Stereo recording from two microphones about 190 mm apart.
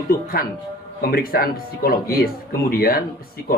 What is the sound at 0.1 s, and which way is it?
Speech, 50° left (ahead or behind).